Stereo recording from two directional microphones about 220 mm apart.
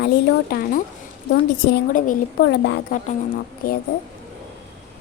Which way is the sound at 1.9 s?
40° left (ahead or behind).